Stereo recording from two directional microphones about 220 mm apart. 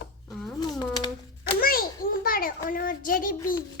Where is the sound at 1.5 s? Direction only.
40° left (ahead or behind).